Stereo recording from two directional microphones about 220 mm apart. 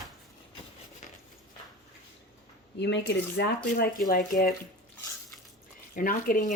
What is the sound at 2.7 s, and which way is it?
Speech, 50° left (ahead or behind).